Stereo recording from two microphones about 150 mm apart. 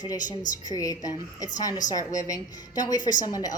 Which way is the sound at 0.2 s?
60° left (ahead or behind).